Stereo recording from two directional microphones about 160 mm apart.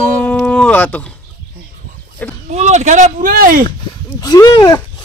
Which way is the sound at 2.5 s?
45° right (ahead or behind).